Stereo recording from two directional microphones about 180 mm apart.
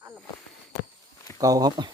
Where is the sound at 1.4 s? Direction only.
20° right (ahead or behind).